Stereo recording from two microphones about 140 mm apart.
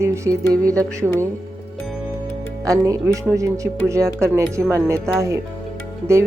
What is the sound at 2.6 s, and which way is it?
Speech, 25° right (ahead or behind).